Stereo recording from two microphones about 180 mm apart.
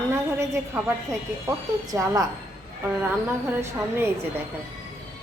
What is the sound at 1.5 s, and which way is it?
Speech, 15° right (ahead or behind).